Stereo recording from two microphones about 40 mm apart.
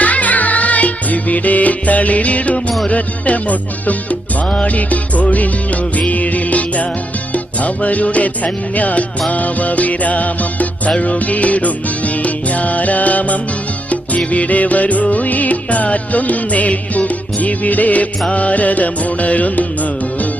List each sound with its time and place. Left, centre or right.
0.0 s music: left